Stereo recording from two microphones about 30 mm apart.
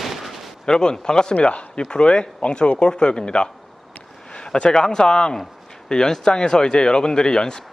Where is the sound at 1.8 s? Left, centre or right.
Left.